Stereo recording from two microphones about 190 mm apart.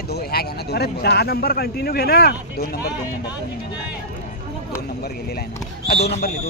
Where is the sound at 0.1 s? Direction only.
55° left (ahead or behind).